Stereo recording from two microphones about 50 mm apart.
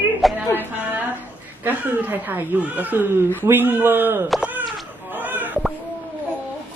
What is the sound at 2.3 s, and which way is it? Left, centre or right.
Speech, right.